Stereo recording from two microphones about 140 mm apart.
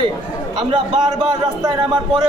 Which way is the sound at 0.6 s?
35° right (ahead or behind).